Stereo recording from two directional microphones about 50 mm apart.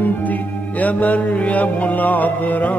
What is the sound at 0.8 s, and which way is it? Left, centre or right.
Music, left.